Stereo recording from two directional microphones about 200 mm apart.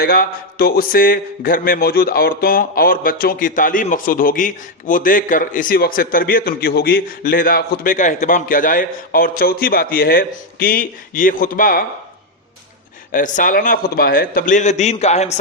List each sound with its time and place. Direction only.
0.0 s a man's voice: 50° left (ahead or behind)
13.1 s a man's voice: 40° left (ahead or behind)